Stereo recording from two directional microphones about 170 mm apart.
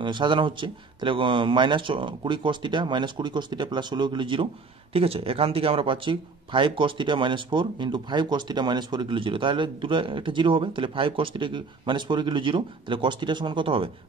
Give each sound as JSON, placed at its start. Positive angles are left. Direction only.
{"t": 0.0, "sound": "speech", "side_deg": -30}